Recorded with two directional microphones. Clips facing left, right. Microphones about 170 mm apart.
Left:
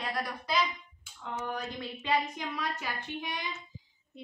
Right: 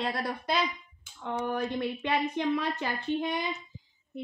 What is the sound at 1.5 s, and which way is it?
A woman's voice, 60° right (ahead or behind).